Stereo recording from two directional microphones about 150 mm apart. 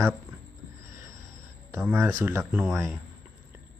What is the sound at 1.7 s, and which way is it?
Speech, 15° right (ahead or behind).